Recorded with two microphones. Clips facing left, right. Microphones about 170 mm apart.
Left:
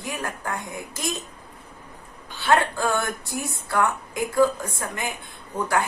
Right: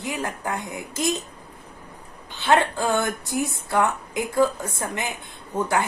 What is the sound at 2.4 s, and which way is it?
Speech, 20° right (ahead or behind).